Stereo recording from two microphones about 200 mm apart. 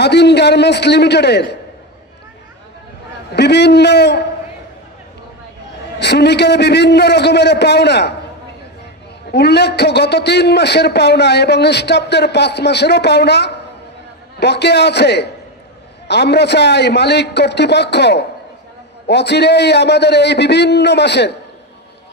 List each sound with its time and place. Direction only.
0.0 s a man's voice: 55° left (ahead or behind)
3.3 s a man's voice: 55° left (ahead or behind)
5.9 s a man's voice: 55° left (ahead or behind)
9.3 s a man's voice: 55° left (ahead or behind)